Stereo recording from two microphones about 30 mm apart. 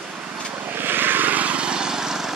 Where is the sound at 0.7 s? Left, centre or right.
Right.